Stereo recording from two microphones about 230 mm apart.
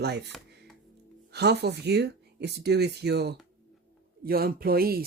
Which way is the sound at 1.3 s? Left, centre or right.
Right.